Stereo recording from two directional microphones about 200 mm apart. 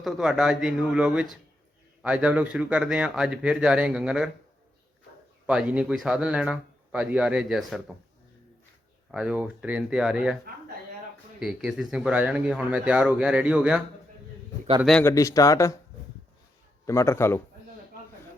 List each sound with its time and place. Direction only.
0.0 s speech: centre (ahead or behind)
5.5 s speech: 5° right (ahead or behind)
9.1 s speech: 5° right (ahead or behind)
11.3 s speech: centre (ahead or behind)
15.0 s speech: 15° left (ahead or behind)
16.8 s speech: 15° left (ahead or behind)